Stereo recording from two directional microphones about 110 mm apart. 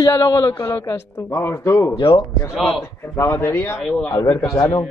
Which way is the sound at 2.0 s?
55° left (ahead or behind).